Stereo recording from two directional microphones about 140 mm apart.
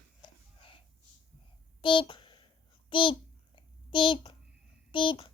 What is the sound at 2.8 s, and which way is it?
Babbling, 35° left (ahead or behind).